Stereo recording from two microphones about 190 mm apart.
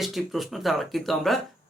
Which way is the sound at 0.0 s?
Centre (ahead or behind).